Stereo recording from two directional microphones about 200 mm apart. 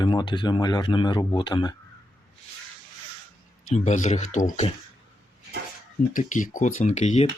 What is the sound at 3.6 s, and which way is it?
Speech, 35° left (ahead or behind).